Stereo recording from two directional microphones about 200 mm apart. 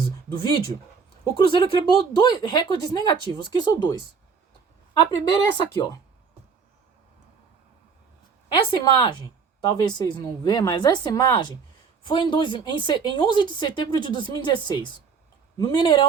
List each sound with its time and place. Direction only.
0.3 s speech: 25° left (ahead or behind)
5.3 s speech: 20° left (ahead or behind)
8.4 s speech: 25° left (ahead or behind)